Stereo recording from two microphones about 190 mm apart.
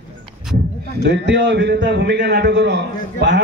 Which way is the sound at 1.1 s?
70° right (ahead or behind).